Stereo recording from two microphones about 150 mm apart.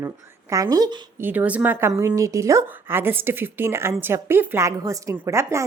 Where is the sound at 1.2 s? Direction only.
10° right (ahead or behind).